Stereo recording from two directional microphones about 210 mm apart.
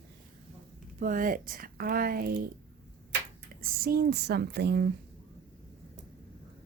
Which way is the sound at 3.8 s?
45° right (ahead or behind).